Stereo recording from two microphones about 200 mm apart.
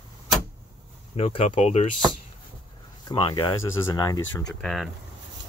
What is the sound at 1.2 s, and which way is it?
Speech, 25° left (ahead or behind).